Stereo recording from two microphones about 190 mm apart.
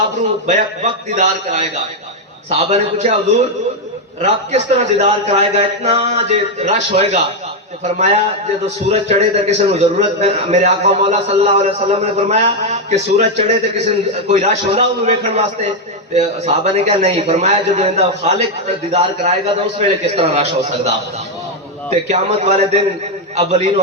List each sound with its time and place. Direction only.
0.4 s a man's voice: 40° right (ahead or behind)
2.6 s a man's voice: 40° right (ahead or behind)